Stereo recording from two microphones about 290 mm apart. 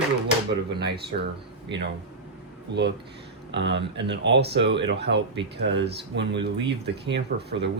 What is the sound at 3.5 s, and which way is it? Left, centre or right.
Speech, right.